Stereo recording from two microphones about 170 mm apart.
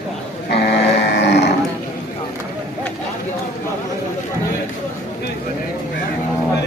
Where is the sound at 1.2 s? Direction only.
90° left.